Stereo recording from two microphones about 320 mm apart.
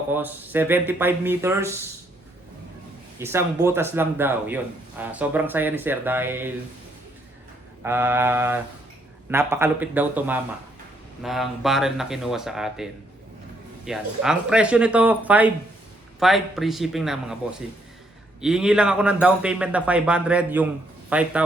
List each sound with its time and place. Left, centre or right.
0.1 s speech: centre
3.2 s speech: centre
7.8 s a man's voice: centre